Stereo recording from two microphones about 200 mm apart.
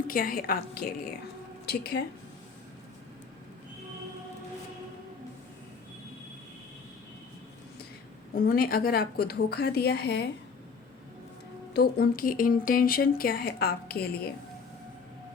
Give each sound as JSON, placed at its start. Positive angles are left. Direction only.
{"t": 0.1, "sound": "a woman's voice", "side_deg": 45}
{"t": 8.4, "sound": "speech", "side_deg": 45}
{"t": 11.7, "sound": "speech", "side_deg": 50}